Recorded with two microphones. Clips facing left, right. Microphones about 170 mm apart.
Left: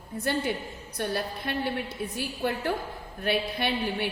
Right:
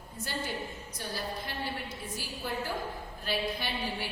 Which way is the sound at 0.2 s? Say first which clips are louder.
Left 8 dB; 60° left (ahead or behind).